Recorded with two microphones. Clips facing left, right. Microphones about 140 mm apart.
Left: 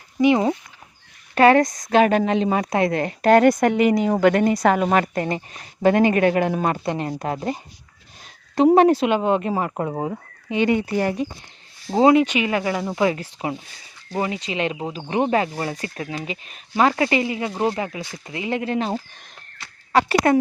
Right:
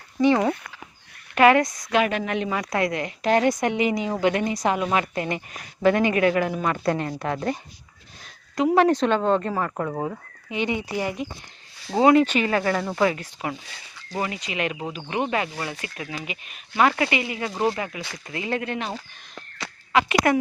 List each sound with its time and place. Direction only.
0.2 s speech: 15° left (ahead or behind)
1.4 s speech: 35° left (ahead or behind)
2.9 s speech: 40° left (ahead or behind)
6.7 s speech: 25° left (ahead or behind)
8.9 s speech: 10° left (ahead or behind)
10.8 s speech: 55° left (ahead or behind)
12.1 s speech: 15° left (ahead or behind)
13.0 s speech: 25° left (ahead or behind)